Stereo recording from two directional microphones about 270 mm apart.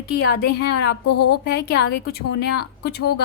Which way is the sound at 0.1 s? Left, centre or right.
Left.